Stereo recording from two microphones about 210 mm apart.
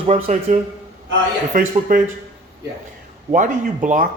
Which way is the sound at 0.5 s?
40° right (ahead or behind).